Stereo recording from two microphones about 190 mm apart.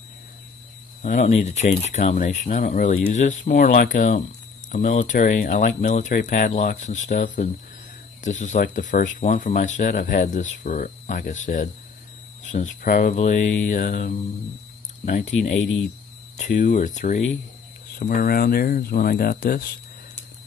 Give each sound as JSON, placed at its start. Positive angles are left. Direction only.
{"t": 1.0, "sound": "speech", "side_deg": 40}